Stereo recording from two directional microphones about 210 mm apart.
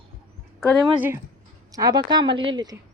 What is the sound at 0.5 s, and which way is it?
A woman's voice, 5° right (ahead or behind).